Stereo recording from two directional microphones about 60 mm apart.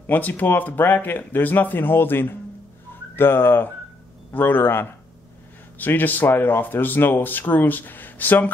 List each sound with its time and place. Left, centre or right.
0.0 s speech: left